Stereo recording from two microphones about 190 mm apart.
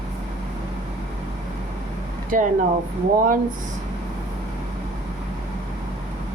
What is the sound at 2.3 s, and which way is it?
Speech, 45° right (ahead or behind).